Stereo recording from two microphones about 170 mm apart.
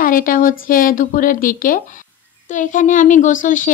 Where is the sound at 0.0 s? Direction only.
55° left (ahead or behind).